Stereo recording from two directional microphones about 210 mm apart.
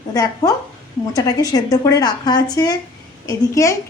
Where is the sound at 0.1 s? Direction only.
20° left (ahead or behind).